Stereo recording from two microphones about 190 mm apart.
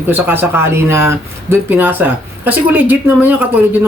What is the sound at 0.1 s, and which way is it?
Speech, 10° right (ahead or behind).